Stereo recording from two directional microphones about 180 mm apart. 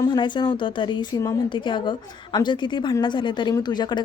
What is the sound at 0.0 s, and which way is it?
Speech, 25° left (ahead or behind).